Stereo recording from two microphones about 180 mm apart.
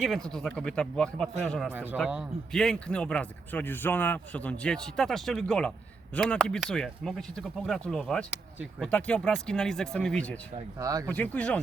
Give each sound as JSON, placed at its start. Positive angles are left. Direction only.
{"t": 0.0, "sound": "a man's voice", "side_deg": 0}
{"t": 1.7, "sound": "a man's voice", "side_deg": -10}
{"t": 10.8, "sound": "speech", "side_deg": -20}
{"t": 11.0, "sound": "speech", "side_deg": 10}